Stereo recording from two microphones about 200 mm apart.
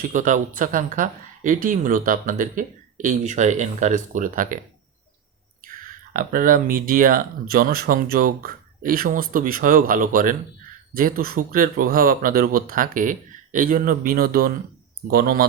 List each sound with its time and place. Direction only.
0.0 s speech: 40° right (ahead or behind)
5.6 s speech: 45° right (ahead or behind)